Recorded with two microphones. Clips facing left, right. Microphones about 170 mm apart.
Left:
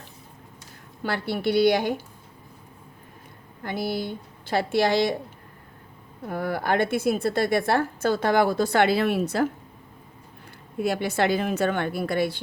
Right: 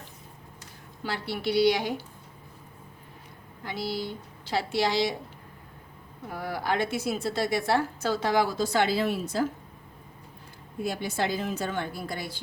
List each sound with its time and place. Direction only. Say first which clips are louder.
1.0 s a woman's voice: left 5 dB; 55° left (ahead or behind)
3.6 s speech: left 4 dB; 55° left (ahead or behind)
6.2 s a woman's voice: left 5 dB; 55° left (ahead or behind)
10.8 s a woman's voice: left 6 dB; 70° left (ahead or behind)